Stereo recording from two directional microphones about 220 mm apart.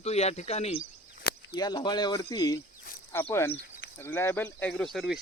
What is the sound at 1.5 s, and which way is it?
Speech, 20° left (ahead or behind).